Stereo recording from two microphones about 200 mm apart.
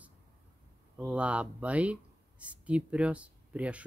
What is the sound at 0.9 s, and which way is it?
Speech, 5° right (ahead or behind).